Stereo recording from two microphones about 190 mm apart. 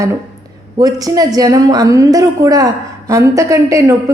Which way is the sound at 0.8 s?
20° right (ahead or behind).